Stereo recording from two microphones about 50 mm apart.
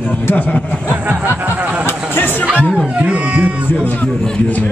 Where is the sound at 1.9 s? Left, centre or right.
Left.